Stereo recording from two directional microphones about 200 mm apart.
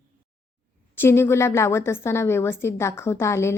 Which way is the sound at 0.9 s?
10° left (ahead or behind).